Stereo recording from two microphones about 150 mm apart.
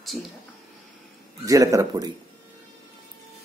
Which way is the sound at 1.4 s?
20° right (ahead or behind).